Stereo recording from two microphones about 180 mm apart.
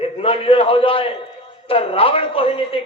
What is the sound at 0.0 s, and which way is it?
A man's voice, 30° left (ahead or behind).